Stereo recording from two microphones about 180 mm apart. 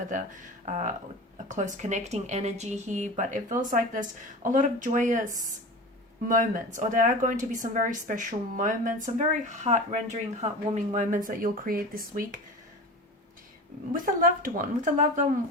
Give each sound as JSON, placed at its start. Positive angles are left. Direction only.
{"t": 0.1, "sound": "speech", "side_deg": -40}
{"t": 13.9, "sound": "speech", "side_deg": -50}